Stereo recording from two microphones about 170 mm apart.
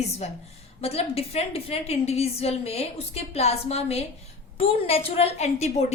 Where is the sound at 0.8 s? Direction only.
35° left (ahead or behind).